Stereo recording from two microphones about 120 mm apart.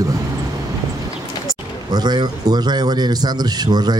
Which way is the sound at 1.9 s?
35° right (ahead or behind).